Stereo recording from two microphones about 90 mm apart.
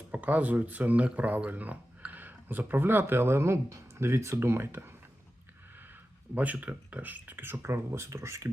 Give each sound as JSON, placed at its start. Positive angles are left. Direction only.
{"t": 0.1, "sound": "speech", "side_deg": -15}
{"t": 6.3, "sound": "speech", "side_deg": -15}